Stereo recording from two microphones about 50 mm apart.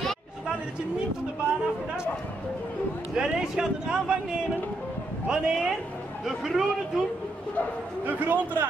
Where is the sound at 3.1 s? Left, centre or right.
Centre.